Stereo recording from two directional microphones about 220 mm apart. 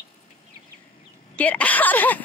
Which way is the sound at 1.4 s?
5° left (ahead or behind).